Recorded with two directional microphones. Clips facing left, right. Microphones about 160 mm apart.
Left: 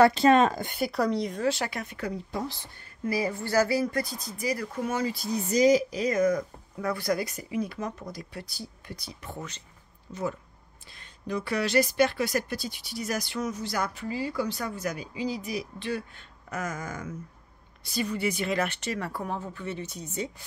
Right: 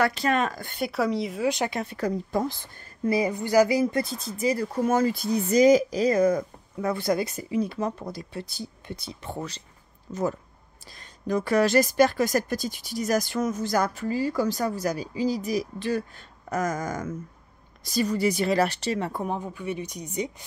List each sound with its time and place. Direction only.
0.0 s speech: 25° left (ahead or behind)
0.7 s speech: centre (ahead or behind)
1.5 s speech: 20° right (ahead or behind)
2.0 s speech: 45° right (ahead or behind)
3.1 s speech: 20° right (ahead or behind)
4.8 s speech: 50° right (ahead or behind); by 9.6 s 30° right (ahead or behind)
10.1 s speech: 45° right (ahead or behind); by 20.4 s 15° right (ahead or behind)